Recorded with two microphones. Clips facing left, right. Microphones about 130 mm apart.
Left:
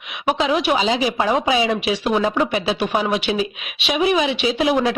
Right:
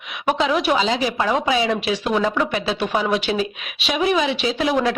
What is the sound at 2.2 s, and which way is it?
Speech, 25° left (ahead or behind).